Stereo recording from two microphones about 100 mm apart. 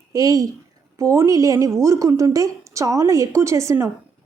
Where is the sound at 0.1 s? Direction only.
35° right (ahead or behind).